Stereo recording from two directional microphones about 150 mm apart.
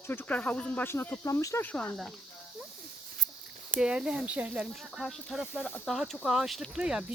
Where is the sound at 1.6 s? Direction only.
10° left (ahead or behind).